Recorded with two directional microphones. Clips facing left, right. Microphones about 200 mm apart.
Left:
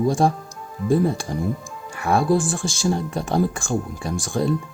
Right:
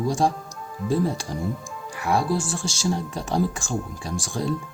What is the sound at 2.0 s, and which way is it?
Speech, 55° left (ahead or behind).